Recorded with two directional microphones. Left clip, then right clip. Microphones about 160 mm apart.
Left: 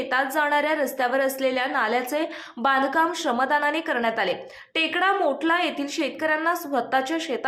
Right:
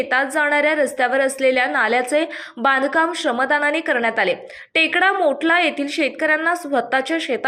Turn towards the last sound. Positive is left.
turn(degrees=-20)  # may be behind; listen again after turning